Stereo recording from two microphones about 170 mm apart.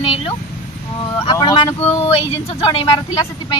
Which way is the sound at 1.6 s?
35° left (ahead or behind).